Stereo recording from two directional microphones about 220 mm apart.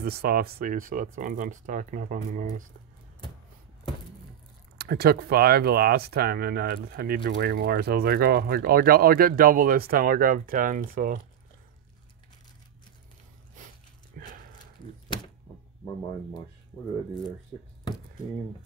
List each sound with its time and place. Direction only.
0.0 s speech: 45° right (ahead or behind)
4.7 s speech: 45° right (ahead or behind)
14.2 s horse: 35° right (ahead or behind)
15.1 s a sound: 20° left (ahead or behind)